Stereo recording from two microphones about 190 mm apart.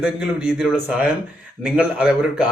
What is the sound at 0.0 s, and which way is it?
A man's voice, 5° right (ahead or behind).